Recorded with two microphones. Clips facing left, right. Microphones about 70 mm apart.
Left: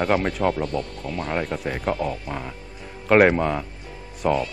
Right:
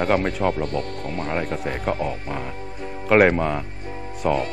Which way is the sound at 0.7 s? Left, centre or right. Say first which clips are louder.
Right 1 dB; right.